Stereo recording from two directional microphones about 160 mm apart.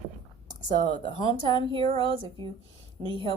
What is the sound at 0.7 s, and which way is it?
A woman's voice, 30° right (ahead or behind).